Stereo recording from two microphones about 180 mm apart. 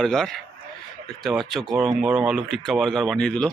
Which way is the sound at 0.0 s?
5° left (ahead or behind).